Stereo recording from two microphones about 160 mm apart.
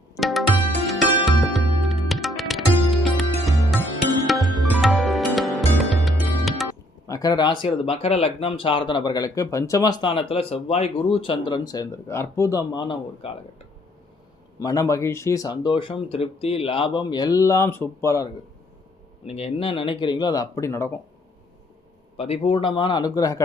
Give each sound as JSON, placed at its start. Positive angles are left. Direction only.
{"t": 0.2, "sound": "music", "side_deg": 0}
{"t": 7.1, "sound": "speech", "side_deg": 25}
{"t": 14.6, "sound": "speech", "side_deg": 20}
{"t": 19.2, "sound": "speech", "side_deg": 40}
{"t": 22.2, "sound": "speech", "side_deg": 35}